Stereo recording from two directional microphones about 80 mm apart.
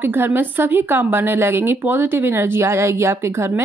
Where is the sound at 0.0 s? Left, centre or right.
Right.